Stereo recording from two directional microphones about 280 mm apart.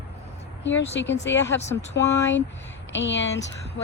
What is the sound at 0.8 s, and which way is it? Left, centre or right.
Speech, left.